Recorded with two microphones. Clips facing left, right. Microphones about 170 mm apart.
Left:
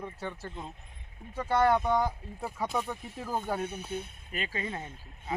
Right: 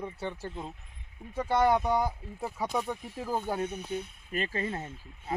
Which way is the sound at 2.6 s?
Centre (ahead or behind).